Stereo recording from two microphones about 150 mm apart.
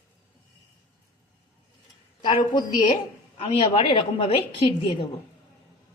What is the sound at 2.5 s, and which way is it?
A woman's voice, 35° left (ahead or behind).